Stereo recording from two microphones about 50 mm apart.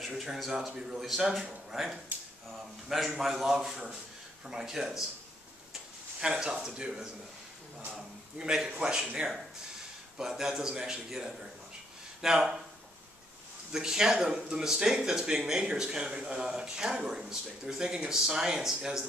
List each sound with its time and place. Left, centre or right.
0.0 s speech: centre
2.1 s speech: right
3.2 s speech: centre
6.2 s speech: centre
13.7 s speech: centre